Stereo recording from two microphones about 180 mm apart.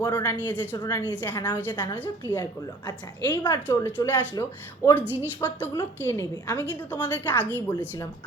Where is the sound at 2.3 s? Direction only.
20° left (ahead or behind).